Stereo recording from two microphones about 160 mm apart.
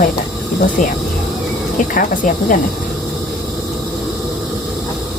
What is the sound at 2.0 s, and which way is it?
Speech, 55° left (ahead or behind).